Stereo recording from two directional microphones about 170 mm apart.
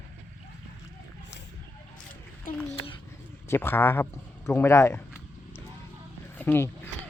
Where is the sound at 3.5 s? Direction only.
15° left (ahead or behind).